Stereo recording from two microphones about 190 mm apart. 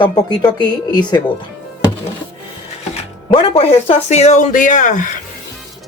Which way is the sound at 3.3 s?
30° left (ahead or behind).